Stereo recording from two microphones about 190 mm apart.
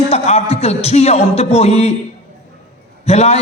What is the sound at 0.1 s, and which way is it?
A man's voice, 30° left (ahead or behind).